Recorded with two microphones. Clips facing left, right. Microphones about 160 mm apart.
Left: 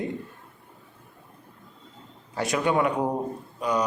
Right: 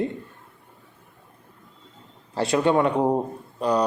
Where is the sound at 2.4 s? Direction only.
25° right (ahead or behind).